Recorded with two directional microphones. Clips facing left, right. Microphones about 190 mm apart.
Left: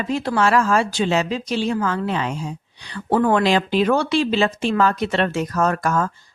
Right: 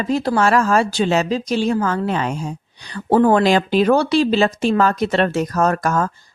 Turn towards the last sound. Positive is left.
turn(degrees=-40)  # may be behind; listen again after turning